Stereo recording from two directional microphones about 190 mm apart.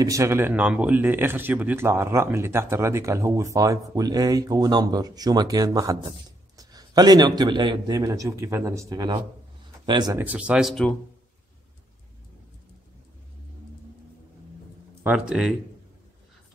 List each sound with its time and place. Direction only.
0.0 s a man's voice: 15° right (ahead or behind)
10.1 s speech: 10° right (ahead or behind)
15.0 s speech: 5° right (ahead or behind)